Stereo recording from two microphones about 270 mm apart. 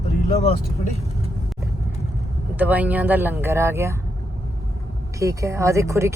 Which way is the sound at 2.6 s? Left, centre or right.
Centre.